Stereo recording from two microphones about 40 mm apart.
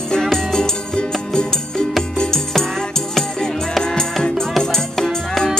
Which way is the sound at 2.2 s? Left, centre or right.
Centre.